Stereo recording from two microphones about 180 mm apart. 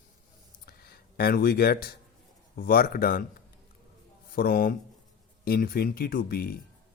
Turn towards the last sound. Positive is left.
turn(degrees=60)  # may be behind; listen again after turning